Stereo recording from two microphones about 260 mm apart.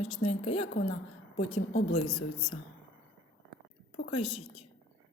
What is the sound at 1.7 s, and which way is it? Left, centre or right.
Speech, left.